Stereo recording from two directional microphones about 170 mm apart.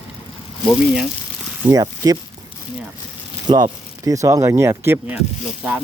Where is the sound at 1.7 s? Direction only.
20° right (ahead or behind).